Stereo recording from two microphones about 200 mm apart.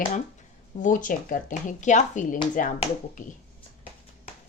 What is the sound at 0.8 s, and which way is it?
Speech, 40° left (ahead or behind).